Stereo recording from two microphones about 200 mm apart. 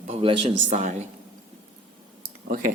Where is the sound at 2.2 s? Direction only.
45° right (ahead or behind).